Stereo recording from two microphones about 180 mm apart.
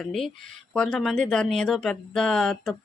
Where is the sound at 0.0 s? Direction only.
Centre (ahead or behind).